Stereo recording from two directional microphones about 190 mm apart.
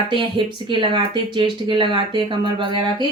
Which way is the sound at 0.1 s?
25° right (ahead or behind).